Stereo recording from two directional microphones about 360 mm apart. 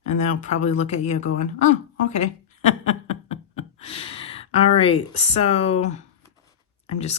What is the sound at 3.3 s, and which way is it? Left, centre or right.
Speech, centre.